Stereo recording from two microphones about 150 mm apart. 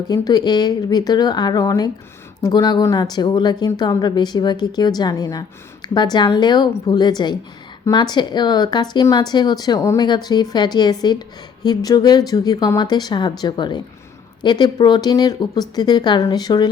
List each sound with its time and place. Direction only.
0.1 s a woman's voice: 25° left (ahead or behind)